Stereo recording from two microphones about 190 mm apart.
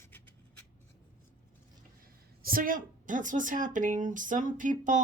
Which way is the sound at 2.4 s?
50° right (ahead or behind).